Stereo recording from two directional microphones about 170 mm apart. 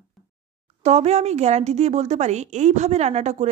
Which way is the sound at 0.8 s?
40° right (ahead or behind).